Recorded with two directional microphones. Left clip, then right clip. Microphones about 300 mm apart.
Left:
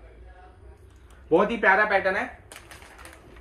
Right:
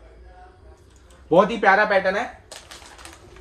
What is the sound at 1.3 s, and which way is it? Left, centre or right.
Speech, right.